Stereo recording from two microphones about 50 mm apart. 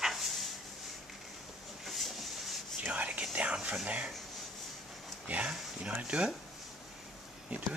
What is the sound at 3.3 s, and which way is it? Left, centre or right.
Speech, right.